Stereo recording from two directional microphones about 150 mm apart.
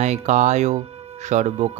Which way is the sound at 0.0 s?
50° right (ahead or behind).